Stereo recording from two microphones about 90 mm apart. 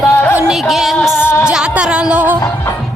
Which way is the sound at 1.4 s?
10° right (ahead or behind).